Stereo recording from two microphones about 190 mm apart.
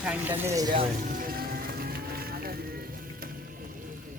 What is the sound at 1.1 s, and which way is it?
Music, 50° right (ahead or behind).